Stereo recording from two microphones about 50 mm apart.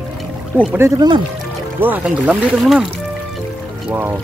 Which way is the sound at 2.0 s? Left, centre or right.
Right.